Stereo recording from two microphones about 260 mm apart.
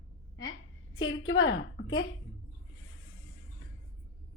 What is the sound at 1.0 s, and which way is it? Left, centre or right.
Speech, left.